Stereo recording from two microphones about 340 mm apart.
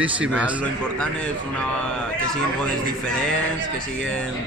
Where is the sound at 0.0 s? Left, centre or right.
Centre.